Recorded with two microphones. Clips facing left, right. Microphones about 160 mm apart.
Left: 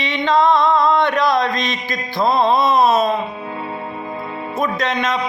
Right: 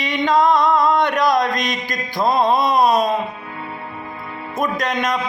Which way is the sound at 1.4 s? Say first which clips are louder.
Even; 45° right (ahead or behind).